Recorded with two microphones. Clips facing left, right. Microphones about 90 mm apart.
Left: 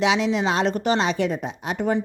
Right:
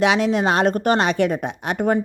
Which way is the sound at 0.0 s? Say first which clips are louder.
Right 3 dB; 50° right (ahead or behind).